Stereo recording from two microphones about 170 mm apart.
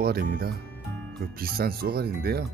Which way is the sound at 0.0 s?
65° right (ahead or behind).